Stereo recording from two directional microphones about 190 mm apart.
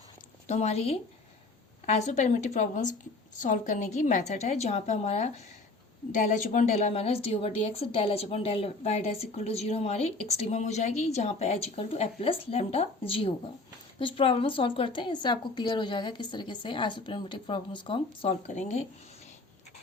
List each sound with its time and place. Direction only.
0.4 s a woman's voice: 35° left (ahead or behind)